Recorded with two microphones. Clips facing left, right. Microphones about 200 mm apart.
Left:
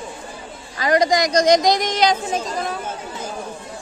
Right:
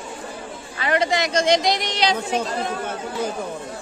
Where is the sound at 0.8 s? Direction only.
35° left (ahead or behind).